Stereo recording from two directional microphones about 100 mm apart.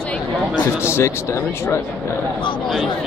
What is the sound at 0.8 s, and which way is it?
Speech, 30° left (ahead or behind).